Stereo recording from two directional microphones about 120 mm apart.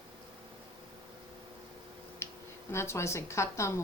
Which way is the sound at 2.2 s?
20° left (ahead or behind).